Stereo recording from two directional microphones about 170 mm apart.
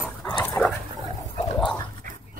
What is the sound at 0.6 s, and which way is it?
Dog, 15° left (ahead or behind).